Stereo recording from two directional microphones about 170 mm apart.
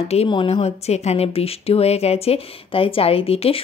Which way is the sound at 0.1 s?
35° left (ahead or behind).